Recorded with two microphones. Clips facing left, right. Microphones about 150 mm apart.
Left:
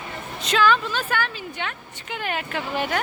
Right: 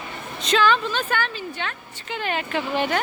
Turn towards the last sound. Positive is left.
turn(degrees=5)  # may be behind; listen again after turning